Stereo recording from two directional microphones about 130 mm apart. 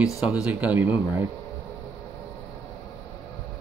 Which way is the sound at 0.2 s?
10° right (ahead or behind).